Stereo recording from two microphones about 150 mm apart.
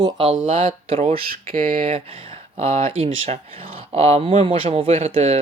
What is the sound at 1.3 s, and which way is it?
Speech, 75° right (ahead or behind).